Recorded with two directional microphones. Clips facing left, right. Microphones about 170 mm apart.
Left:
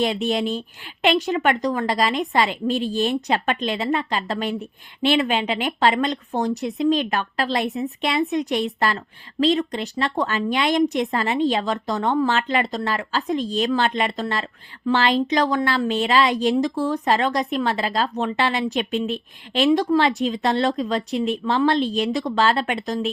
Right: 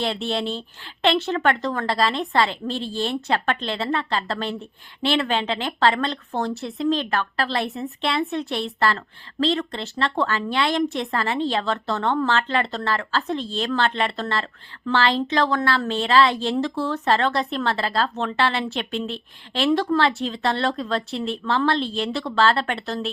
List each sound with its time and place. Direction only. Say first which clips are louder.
0.0 s a woman's voice: left 3 dB; 15° left (ahead or behind)